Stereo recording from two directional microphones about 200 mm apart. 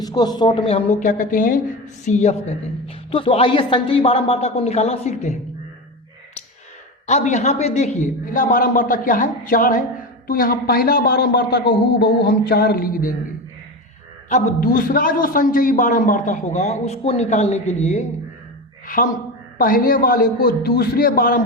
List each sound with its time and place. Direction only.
0.0 s a man's voice: 20° left (ahead or behind); by 5.4 s 35° left (ahead or behind)
7.1 s a man's voice: 35° left (ahead or behind)
14.3 s a man's voice: 35° left (ahead or behind)
19.5 s a man's voice: 45° left (ahead or behind)